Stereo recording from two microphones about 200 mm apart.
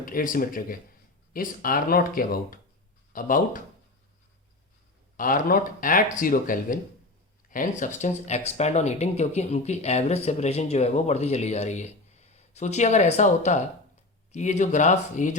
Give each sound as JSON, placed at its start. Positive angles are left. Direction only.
{"t": 0.0, "sound": "speech", "side_deg": 45}
{"t": 5.1, "sound": "speech", "side_deg": 45}